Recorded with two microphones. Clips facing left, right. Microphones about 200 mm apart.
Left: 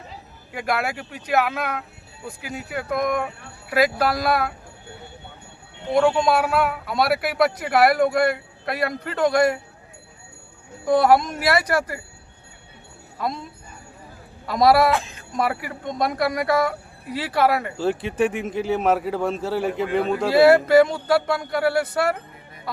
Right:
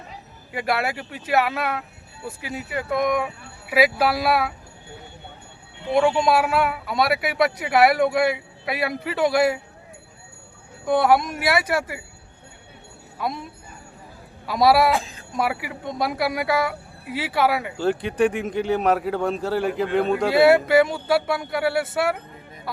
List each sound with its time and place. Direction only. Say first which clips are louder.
0.5 s speech: right 1 dB; centre (ahead or behind)
5.9 s speech: even; centre (ahead or behind)
10.8 s speech: left 2 dB; centre (ahead or behind)
14.4 s speech: left 1 dB; centre (ahead or behind)
14.9 s speech: left 1 dB; 35° right (ahead or behind)
15.3 s speech: left 1 dB; centre (ahead or behind)